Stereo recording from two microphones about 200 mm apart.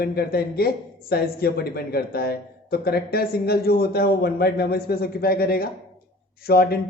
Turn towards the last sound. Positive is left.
turn(degrees=50)  # may be behind; listen again after turning